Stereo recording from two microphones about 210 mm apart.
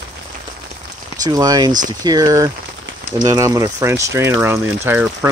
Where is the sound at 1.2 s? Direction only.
15° right (ahead or behind).